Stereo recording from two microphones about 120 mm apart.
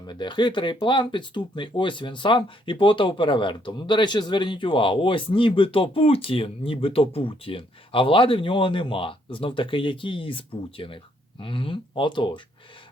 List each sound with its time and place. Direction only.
0.1 s speech: 40° left (ahead or behind)